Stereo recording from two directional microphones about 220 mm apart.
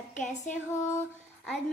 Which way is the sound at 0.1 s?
35° left (ahead or behind).